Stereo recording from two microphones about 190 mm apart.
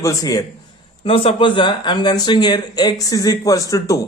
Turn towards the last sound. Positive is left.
turn(degrees=15)  # may be behind; listen again after turning